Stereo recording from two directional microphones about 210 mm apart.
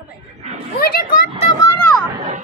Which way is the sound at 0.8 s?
45° left (ahead or behind).